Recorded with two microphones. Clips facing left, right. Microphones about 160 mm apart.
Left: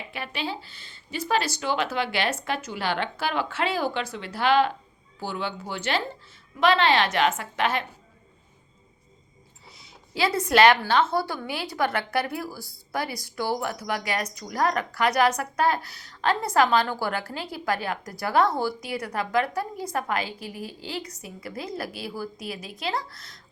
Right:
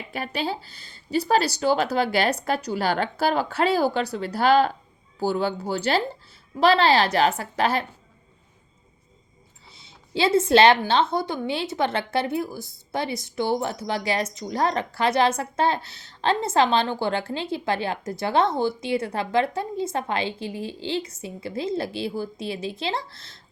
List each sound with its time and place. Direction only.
0.1 s speech: 40° right (ahead or behind)
9.7 s a woman's voice: 25° right (ahead or behind)